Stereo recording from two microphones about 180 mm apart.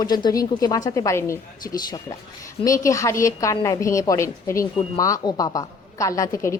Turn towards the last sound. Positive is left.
turn(degrees=20)  # may be behind; listen again after turning